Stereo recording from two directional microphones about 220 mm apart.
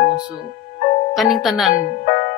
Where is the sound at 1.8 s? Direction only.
45° left (ahead or behind).